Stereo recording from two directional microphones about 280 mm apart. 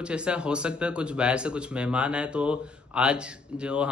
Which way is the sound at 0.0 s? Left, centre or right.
Centre.